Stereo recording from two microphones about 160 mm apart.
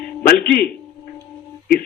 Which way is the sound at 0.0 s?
65° left (ahead or behind).